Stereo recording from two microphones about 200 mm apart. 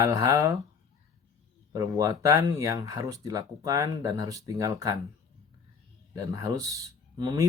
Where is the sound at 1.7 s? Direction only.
20° right (ahead or behind).